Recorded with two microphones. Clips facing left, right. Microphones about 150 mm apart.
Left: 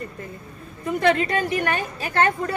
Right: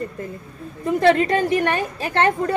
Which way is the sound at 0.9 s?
35° right (ahead or behind).